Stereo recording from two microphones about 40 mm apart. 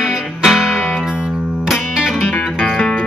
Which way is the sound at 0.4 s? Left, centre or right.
Centre.